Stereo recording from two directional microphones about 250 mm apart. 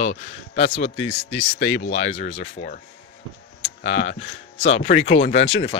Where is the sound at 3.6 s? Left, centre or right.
Left.